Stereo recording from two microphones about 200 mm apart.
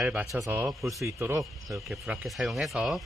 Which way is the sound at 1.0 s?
15° right (ahead or behind).